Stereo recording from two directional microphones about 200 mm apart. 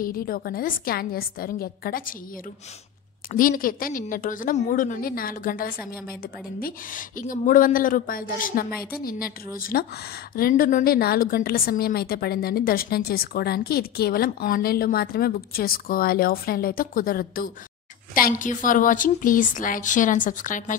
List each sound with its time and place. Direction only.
0.0 s a woman's voice: 45° left (ahead or behind)
3.3 s a woman's voice: 45° left (ahead or behind)